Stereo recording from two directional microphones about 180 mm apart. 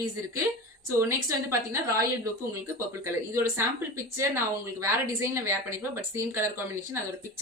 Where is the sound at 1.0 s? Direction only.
15° right (ahead or behind).